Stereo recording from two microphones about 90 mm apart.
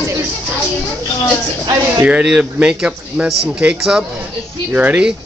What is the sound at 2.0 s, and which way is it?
A man's voice, 15° right (ahead or behind).